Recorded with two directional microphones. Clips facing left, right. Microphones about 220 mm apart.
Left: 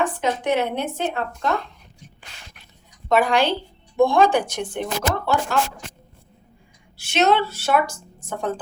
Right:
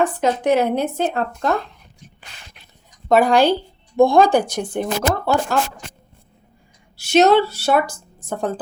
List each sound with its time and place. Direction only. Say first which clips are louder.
0.0 s a woman's voice: right 4 dB; 40° right (ahead or behind)
3.1 s a woman's voice: right 5 dB; 35° right (ahead or behind)
6.9 s a woman's voice: right 6 dB; 40° right (ahead or behind)